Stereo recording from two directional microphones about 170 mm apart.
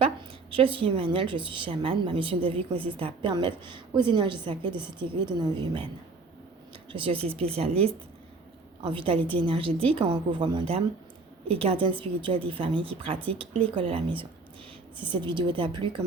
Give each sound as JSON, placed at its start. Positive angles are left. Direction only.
{"t": 0.5, "sound": "a woman's voice", "side_deg": -30}
{"t": 6.9, "sound": "a woman's voice", "side_deg": -30}